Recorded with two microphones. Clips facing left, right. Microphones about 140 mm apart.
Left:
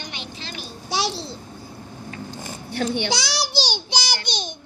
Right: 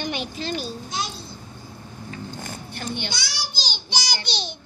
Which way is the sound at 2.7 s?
70° left (ahead or behind).